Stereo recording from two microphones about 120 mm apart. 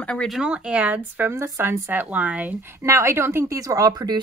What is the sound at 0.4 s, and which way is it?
Speech, 10° right (ahead or behind).